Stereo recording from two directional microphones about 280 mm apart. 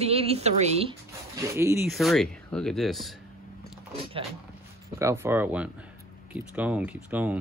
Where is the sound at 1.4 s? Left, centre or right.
Centre.